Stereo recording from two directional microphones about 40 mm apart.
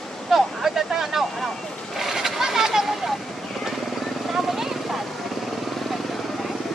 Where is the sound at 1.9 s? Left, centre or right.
Centre.